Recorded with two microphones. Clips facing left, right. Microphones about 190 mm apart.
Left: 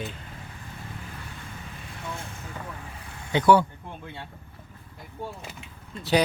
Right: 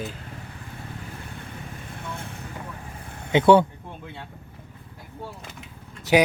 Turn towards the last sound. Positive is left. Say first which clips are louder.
# right 4 dB
turn(degrees=-15)  # may be behind; listen again after turning